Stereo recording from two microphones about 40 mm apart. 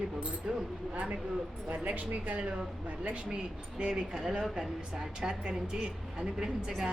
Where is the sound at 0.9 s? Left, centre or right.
Right.